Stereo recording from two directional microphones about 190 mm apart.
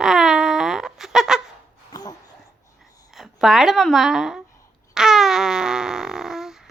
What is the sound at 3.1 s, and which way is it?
A woman's voice, centre (ahead or behind).